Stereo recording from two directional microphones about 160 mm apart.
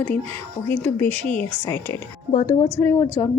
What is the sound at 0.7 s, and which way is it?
A woman's voice, 15° left (ahead or behind).